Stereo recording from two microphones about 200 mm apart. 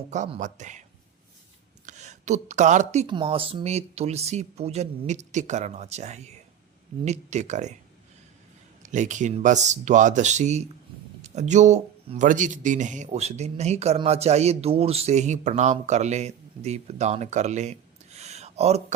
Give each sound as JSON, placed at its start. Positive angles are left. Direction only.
{"t": 0.1, "sound": "speech", "side_deg": -35}
{"t": 1.9, "sound": "speech", "side_deg": -35}
{"t": 8.8, "sound": "speech", "side_deg": -40}